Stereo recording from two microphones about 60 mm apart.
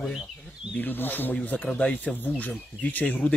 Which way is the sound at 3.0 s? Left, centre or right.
Centre.